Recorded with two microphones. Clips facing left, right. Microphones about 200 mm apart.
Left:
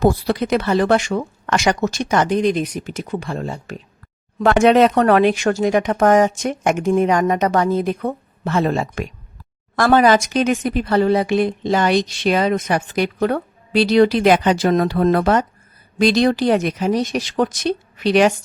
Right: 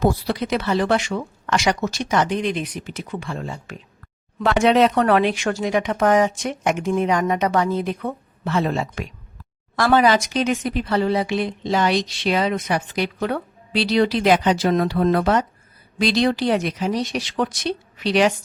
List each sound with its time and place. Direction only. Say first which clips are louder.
0.0 s speech: left 4 dB; 50° left (ahead or behind)